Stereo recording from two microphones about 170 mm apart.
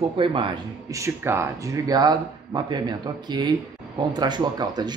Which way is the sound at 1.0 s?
15° right (ahead or behind).